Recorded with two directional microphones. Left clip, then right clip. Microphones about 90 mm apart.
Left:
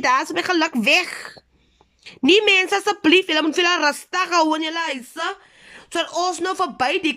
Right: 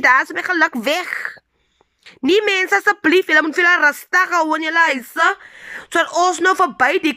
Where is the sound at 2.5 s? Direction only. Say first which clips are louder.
Right 2 dB; 20° left (ahead or behind).